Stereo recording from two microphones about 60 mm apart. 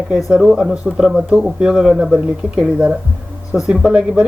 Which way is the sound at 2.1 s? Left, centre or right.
Centre.